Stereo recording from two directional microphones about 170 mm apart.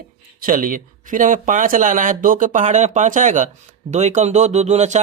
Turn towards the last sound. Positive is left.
turn(degrees=-40)  # may be behind; listen again after turning